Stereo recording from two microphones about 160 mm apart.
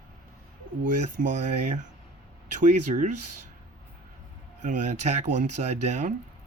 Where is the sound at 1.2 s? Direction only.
60° right (ahead or behind).